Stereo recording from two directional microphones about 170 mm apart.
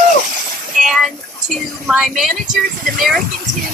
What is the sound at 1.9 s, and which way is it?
Speech, centre (ahead or behind).